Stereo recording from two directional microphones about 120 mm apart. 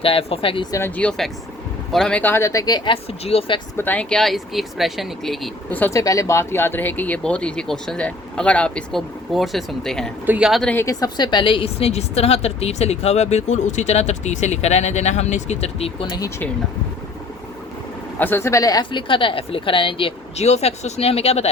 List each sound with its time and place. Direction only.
0.0 s speech: 50° left (ahead or behind)
0.7 s speech: 15° left (ahead or behind)
2.3 s speech: 25° left (ahead or behind)
2.9 s speech: 55° left (ahead or behind)
3.8 s speech: 15° left (ahead or behind)
5.9 s speech: 25° left (ahead or behind); by 10.1 s 5° left (ahead or behind)
10.2 s a woman's voice: 10° right (ahead or behind)
10.8 s a woman's voice: 35° left (ahead or behind); by 16.0 s 60° left (ahead or behind)
16.0 s speech: 35° left (ahead or behind)
18.2 s speech: 20° left (ahead or behind); by 21.5 s 60° left (ahead or behind)